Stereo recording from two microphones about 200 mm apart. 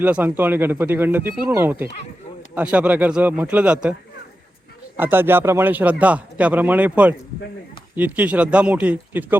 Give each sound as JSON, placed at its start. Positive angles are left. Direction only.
{"t": 0.0, "sound": "a man's voice", "side_deg": -10}
{"t": 4.9, "sound": "a man's voice", "side_deg": -10}